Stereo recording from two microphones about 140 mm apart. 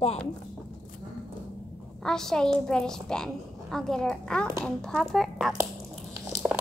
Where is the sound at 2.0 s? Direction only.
5° left (ahead or behind).